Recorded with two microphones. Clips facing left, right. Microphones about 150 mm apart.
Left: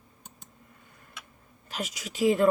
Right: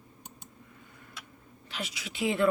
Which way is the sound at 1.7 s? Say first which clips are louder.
Left 3 dB; 45° left (ahead or behind).